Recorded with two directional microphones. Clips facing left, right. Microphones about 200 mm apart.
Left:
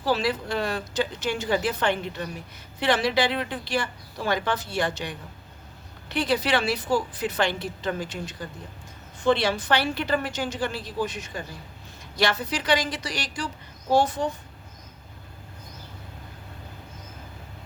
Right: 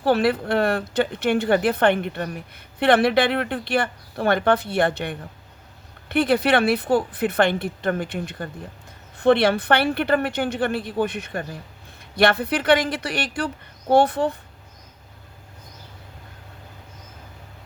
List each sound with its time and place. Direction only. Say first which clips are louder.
0.0 s speech: right 6 dB; 60° right (ahead or behind)